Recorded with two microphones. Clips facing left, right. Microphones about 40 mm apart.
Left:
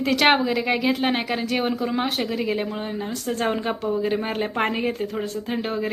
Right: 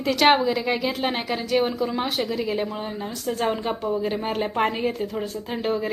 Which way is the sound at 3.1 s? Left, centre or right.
Left.